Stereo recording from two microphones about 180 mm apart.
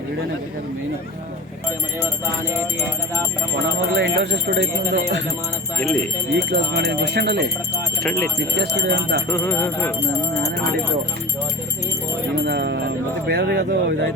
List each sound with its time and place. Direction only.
3.9 s speech: 70° right (ahead or behind)
6.3 s speech: 65° right (ahead or behind)
8.5 s speech: 70° right (ahead or behind)
9.3 s speech: 15° left (ahead or behind)
12.4 s speech: 65° right (ahead or behind)